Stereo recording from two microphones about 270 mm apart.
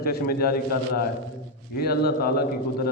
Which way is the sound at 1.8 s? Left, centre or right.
Left.